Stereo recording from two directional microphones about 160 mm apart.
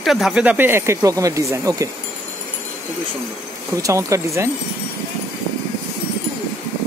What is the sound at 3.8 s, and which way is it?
Speech, 20° right (ahead or behind).